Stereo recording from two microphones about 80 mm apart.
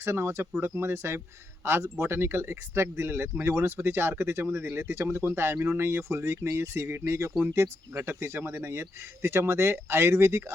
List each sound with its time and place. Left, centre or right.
0.0 s speech: right